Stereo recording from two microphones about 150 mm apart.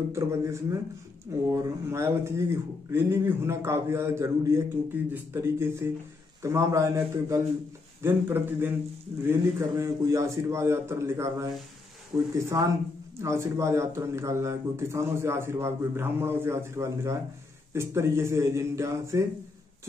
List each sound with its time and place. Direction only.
0.1 s a man's voice: 20° right (ahead or behind)
12.4 s a man's voice: 20° right (ahead or behind)